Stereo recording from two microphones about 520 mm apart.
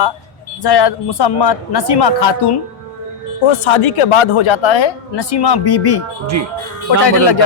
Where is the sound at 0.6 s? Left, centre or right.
Left.